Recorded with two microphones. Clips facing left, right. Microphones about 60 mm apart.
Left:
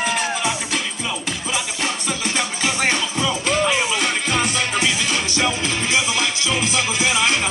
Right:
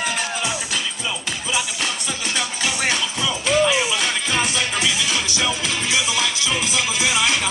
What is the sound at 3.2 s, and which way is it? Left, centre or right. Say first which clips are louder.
Music: right 2 dB; left.